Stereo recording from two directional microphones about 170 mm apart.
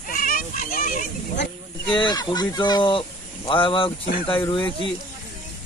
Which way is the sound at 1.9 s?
25° left (ahead or behind).